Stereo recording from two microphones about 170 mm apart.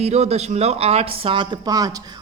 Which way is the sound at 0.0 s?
40° right (ahead or behind).